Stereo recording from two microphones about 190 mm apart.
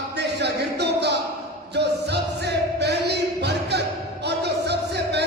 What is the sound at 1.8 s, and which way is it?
Music, 60° right (ahead or behind).